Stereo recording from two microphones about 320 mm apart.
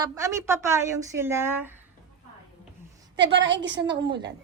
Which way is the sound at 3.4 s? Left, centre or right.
Right.